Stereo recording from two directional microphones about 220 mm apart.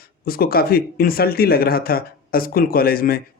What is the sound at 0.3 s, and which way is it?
Speech, 45° left (ahead or behind).